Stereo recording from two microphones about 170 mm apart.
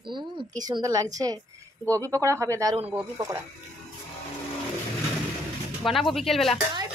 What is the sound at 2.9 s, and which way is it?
Speech, 10° right (ahead or behind).